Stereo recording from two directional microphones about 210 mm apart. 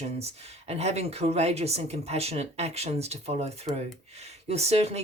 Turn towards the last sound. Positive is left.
turn(degrees=-30)  # may be behind; listen again after turning